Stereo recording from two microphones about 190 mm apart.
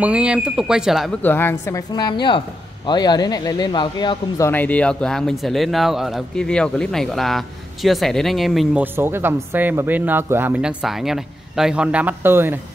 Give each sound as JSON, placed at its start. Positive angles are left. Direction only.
{"t": 0.0, "sound": "speech", "side_deg": -5}
{"t": 1.2, "sound": "a woman's voice", "side_deg": 10}
{"t": 2.0, "sound": "speech", "side_deg": 20}
{"t": 4.5, "sound": "speech", "side_deg": 10}
{"t": 8.9, "sound": "speech", "side_deg": -10}